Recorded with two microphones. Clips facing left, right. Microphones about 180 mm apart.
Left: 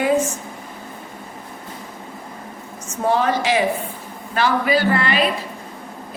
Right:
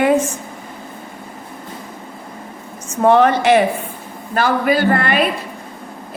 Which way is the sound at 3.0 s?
65° right (ahead or behind).